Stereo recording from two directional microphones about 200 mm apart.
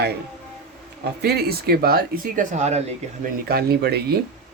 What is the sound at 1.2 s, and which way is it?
Speech, 55° right (ahead or behind).